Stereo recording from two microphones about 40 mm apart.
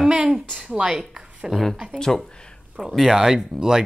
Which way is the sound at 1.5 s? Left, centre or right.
Centre.